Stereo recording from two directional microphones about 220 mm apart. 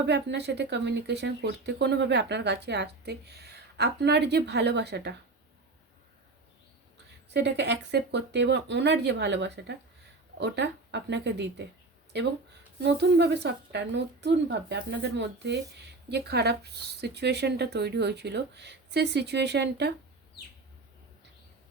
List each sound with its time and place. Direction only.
0.0 s speech: 50° right (ahead or behind)
7.3 s speech: 50° right (ahead or behind)
12.8 s speech: 50° right (ahead or behind)